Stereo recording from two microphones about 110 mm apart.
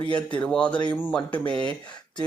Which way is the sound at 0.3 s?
10° left (ahead or behind).